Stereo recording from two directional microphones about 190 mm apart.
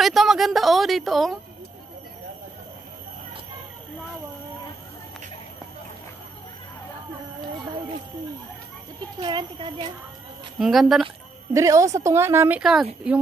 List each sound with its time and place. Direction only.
0.0 s a woman's voice: centre (ahead or behind)
9.2 s speech: 25° right (ahead or behind)
10.6 s a woman's voice: centre (ahead or behind)
11.5 s a woman's voice: 15° right (ahead or behind)